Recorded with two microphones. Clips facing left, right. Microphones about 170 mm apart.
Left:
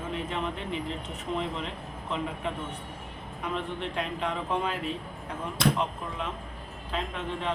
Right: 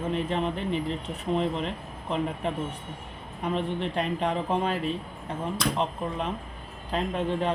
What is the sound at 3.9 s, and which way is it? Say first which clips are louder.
Speech: right 4 dB; 35° right (ahead or behind).